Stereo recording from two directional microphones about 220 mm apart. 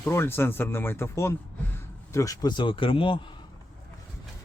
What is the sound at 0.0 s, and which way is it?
Speech, 10° left (ahead or behind).